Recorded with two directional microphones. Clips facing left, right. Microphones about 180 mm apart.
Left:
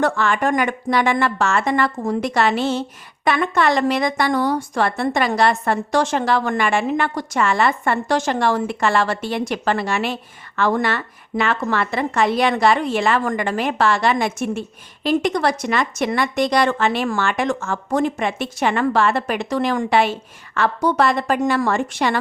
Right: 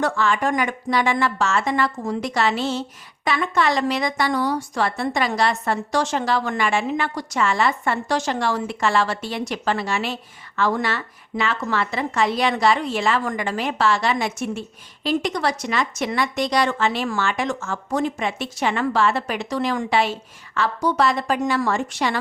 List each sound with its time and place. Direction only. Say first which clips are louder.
0.0 s speech: left 2 dB; 55° left (ahead or behind)